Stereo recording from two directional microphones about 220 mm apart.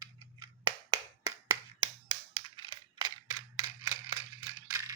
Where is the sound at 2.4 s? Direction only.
20° right (ahead or behind).